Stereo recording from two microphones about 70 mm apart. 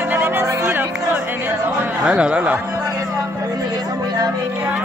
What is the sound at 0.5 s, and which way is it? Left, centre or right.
Music, right.